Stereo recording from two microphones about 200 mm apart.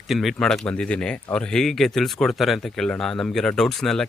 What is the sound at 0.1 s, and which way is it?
Speech, centre (ahead or behind).